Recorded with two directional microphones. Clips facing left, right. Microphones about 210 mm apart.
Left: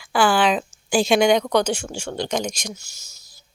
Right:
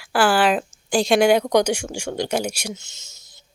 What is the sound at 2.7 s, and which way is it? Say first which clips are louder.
Speech: right 4 dB; 20° right (ahead or behind).